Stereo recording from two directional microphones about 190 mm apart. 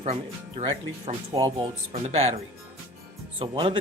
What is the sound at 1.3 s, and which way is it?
Speech, 25° right (ahead or behind).